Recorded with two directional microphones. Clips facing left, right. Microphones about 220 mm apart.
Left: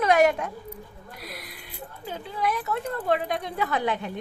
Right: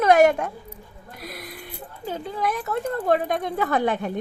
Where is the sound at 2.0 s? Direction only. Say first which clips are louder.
Right 2 dB; 45° right (ahead or behind).